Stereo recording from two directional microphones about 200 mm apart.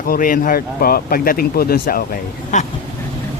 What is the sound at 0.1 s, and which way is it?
Speech, 45° left (ahead or behind).